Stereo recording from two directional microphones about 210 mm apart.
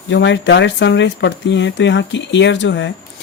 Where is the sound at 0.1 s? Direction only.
60° left (ahead or behind).